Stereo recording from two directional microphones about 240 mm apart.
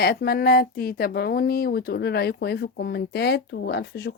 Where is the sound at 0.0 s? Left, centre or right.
Left.